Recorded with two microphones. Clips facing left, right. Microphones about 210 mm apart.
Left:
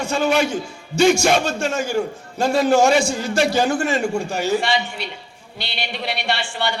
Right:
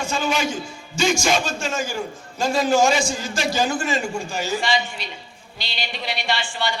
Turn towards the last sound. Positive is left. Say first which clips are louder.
# left 2 dB
turn(degrees=65)  # may be behind; listen again after turning